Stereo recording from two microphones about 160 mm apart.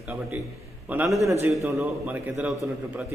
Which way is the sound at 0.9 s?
10° right (ahead or behind).